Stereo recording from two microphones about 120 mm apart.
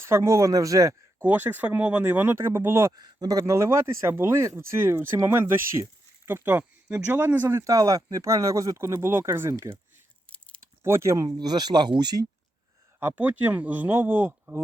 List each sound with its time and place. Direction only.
0.1 s speech: 25° right (ahead or behind)
1.2 s speech: 15° right (ahead or behind)
2.9 s speech: 35° right (ahead or behind)
10.2 s a sound: 10° left (ahead or behind)
10.8 s speech: 25° right (ahead or behind)
13.0 s speech: 15° right (ahead or behind)